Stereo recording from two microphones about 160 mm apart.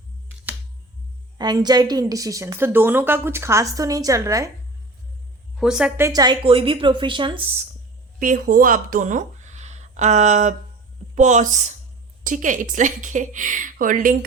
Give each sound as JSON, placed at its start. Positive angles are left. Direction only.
{"t": 1.4, "sound": "a woman's voice", "side_deg": -25}
{"t": 5.5, "sound": "a woman's voice", "side_deg": -5}
{"t": 6.0, "sound": "speech", "side_deg": -25}
{"t": 8.2, "sound": "speech", "side_deg": -60}